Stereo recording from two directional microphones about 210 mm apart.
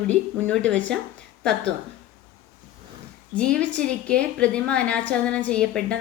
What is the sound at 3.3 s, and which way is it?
A woman's voice, 5° left (ahead or behind).